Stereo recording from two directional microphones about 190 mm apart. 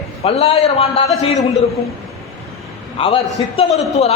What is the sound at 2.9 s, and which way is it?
A man's voice, 30° left (ahead or behind).